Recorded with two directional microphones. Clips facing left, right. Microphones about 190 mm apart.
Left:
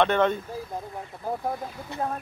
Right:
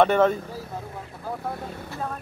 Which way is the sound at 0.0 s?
5° right (ahead or behind).